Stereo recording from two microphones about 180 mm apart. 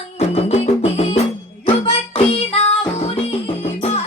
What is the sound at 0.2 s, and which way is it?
Music, 35° left (ahead or behind).